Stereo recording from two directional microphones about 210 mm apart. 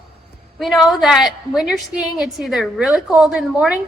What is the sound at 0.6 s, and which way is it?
A woman's voice, centre (ahead or behind).